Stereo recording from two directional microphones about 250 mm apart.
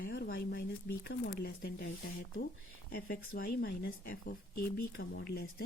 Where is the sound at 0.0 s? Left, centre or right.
Left.